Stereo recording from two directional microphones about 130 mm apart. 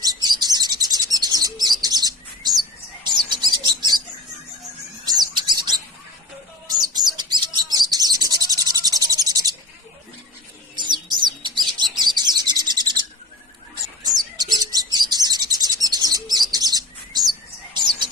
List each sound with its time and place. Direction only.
0.0 s bird: 30° right (ahead or behind)
5.0 s bird: 30° right (ahead or behind)
7.2 s bird: 35° right (ahead or behind)
10.8 s bird: 35° right (ahead or behind)
14.0 s bird: 30° right (ahead or behind)